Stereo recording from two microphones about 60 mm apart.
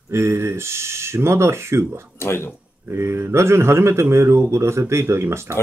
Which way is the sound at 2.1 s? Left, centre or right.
Left.